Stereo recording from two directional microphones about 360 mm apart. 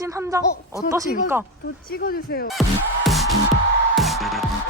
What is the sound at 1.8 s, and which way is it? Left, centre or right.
Speech, left.